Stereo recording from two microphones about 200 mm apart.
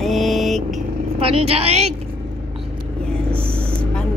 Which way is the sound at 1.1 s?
30° right (ahead or behind).